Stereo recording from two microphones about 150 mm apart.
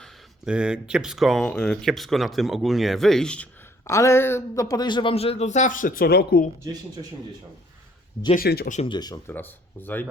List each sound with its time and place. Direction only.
0.0 s speech: 5° right (ahead or behind)
3.8 s speech: 20° left (ahead or behind); by 6.5 s 90° left
8.4 s speech: 80° left
8.9 s speech: 25° left (ahead or behind)
9.3 s speech: 10° left (ahead or behind)